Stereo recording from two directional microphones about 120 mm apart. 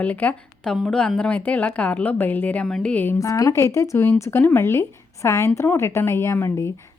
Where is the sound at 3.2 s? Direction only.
30° left (ahead or behind).